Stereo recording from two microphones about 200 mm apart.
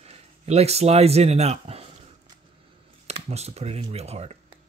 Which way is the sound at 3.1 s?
30° right (ahead or behind).